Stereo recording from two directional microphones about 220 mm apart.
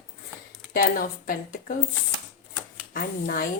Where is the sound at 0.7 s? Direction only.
40° left (ahead or behind).